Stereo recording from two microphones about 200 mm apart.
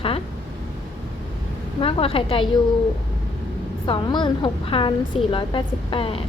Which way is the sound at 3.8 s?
25° left (ahead or behind).